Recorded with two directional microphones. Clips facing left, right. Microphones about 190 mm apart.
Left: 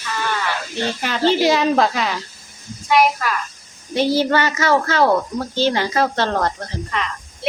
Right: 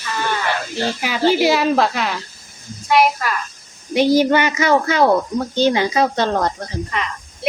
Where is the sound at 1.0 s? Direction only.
10° right (ahead or behind).